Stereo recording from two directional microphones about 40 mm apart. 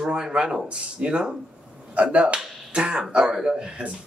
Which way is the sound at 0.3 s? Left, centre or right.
Centre.